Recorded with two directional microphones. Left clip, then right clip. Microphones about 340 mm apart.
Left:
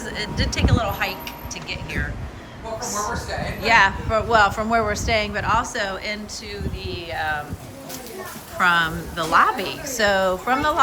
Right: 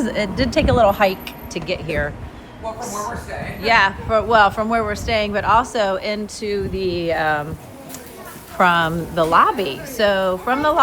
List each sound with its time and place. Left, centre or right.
0.0 s a woman's voice: centre
8.5 s a woman's voice: centre